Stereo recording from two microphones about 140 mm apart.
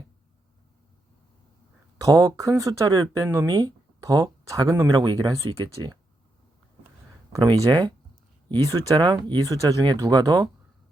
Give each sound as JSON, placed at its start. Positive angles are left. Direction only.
{"t": 2.0, "sound": "speech", "side_deg": -25}
{"t": 7.3, "sound": "speech", "side_deg": -30}
{"t": 9.0, "sound": "speech", "side_deg": -30}